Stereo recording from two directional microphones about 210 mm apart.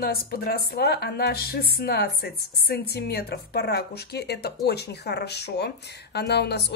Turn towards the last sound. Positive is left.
turn(degrees=50)  # may be behind; listen again after turning